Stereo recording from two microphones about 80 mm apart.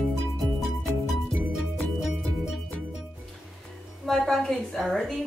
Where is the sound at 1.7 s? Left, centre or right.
Centre.